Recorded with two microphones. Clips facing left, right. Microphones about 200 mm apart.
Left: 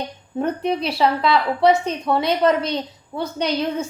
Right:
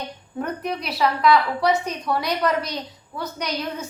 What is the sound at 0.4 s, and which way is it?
A woman's voice, 30° left (ahead or behind).